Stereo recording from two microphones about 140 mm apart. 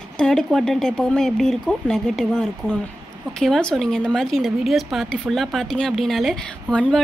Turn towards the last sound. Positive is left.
turn(degrees=5)  # may be behind; listen again after turning